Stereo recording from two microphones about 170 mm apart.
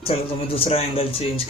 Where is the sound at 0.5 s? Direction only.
35° left (ahead or behind).